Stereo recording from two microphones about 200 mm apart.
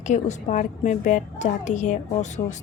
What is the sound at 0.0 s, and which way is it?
A woman's voice, 35° left (ahead or behind).